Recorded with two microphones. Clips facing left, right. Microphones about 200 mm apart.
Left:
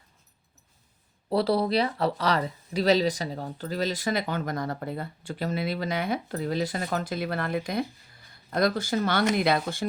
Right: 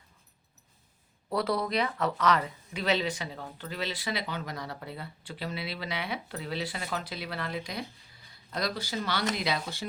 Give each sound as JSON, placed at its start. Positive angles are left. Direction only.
{"t": 1.3, "sound": "speech", "side_deg": 30}